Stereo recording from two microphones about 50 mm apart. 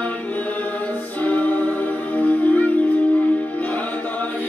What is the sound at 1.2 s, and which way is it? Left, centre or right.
Music, left.